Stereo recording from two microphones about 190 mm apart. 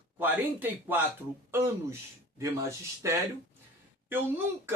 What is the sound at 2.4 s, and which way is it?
Speech, 15° right (ahead or behind).